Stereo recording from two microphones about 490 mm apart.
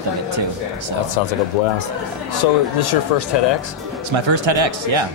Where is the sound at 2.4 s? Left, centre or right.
Left.